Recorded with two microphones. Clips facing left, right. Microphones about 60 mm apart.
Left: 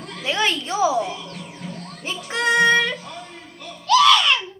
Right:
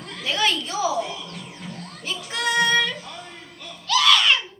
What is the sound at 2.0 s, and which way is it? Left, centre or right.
Music, left.